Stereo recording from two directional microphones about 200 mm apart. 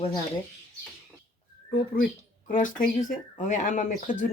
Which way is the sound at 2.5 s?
40° left (ahead or behind).